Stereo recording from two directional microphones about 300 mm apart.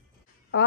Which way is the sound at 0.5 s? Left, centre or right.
Left.